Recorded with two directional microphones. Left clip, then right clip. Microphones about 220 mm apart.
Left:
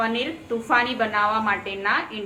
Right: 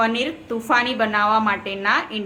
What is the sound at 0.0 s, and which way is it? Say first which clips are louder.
A woman's voice: right 4 dB; 45° right (ahead or behind).